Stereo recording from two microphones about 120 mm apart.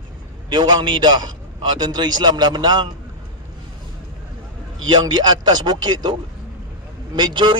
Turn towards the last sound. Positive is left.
turn(degrees=-40)  # may be behind; listen again after turning